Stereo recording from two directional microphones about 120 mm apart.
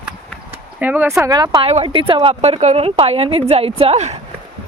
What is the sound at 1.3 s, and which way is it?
Speech, 35° right (ahead or behind).